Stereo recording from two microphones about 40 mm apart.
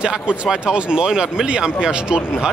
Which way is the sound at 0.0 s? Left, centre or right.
Right.